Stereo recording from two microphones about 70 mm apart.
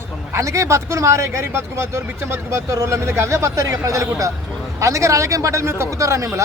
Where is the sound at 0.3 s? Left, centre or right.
Right.